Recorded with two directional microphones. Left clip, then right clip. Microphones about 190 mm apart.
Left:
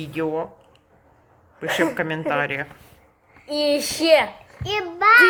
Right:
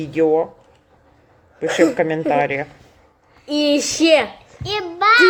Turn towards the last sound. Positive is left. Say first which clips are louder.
# right 1 dB
turn(degrees=15)  # may be behind; listen again after turning